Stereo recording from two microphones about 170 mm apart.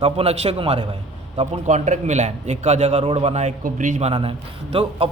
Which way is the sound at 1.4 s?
45° right (ahead or behind).